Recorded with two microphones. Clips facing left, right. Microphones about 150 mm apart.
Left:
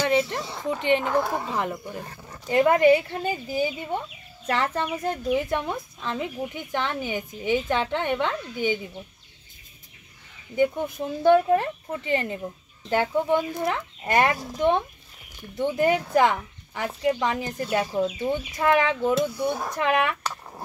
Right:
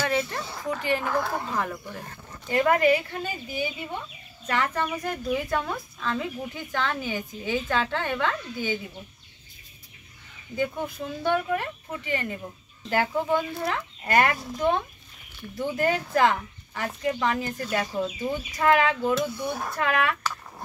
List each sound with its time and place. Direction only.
0.0 s a sound: 20° left (ahead or behind)
0.6 s a woman's voice: 20° left (ahead or behind)
10.5 s a woman's voice: 20° left (ahead or behind)